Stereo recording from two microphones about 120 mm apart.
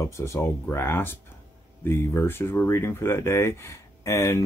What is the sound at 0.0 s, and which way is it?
Speech, 20° left (ahead or behind).